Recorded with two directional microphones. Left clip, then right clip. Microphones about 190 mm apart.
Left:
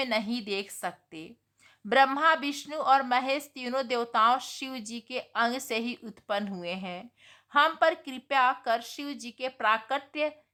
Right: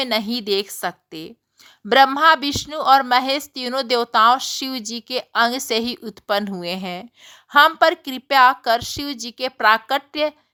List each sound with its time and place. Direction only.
0.0 s a woman's voice: 35° right (ahead or behind)